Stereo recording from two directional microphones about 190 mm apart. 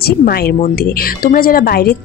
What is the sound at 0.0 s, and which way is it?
Speech, 55° left (ahead or behind).